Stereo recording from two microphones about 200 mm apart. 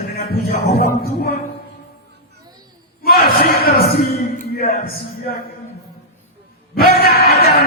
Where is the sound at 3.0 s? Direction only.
50° left (ahead or behind).